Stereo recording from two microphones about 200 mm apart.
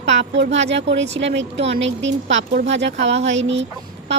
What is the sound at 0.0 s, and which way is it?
A woman's voice, 65° right (ahead or behind).